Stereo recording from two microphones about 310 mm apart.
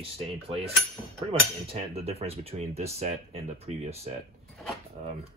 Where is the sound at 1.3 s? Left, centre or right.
Centre.